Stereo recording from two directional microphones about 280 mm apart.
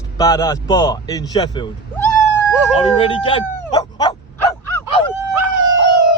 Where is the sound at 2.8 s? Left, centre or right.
Centre.